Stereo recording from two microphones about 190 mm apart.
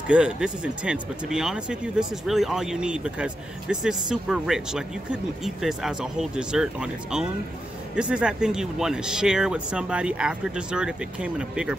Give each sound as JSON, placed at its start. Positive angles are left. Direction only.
{"t": 0.1, "sound": "speech", "side_deg": -5}